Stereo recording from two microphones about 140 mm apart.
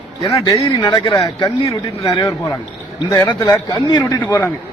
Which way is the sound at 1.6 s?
45° left (ahead or behind).